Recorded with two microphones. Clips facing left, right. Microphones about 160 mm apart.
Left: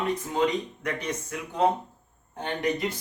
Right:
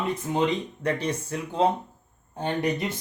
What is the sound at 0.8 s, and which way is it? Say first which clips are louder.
Speech: right 4 dB; 30° right (ahead or behind).